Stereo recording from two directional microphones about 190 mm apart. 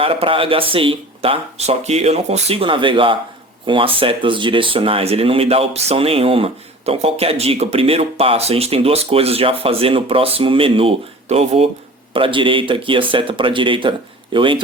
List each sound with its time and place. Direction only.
0.0 s speech: 30° right (ahead or behind)